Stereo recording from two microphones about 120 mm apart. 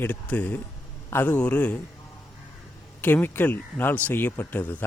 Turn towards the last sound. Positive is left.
turn(degrees=15)  # may be behind; listen again after turning